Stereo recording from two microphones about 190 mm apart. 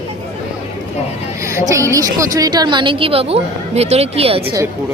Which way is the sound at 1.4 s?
15° right (ahead or behind).